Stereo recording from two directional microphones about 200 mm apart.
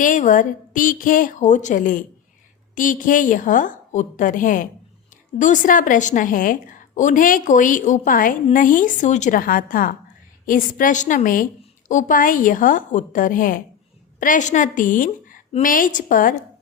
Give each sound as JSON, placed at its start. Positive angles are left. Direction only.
{"t": 0.0, "sound": "a woman's voice", "side_deg": 40}